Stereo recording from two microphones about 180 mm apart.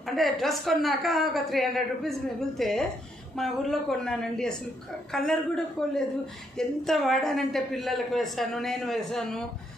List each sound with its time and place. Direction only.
0.0 s a man's voice: centre (ahead or behind)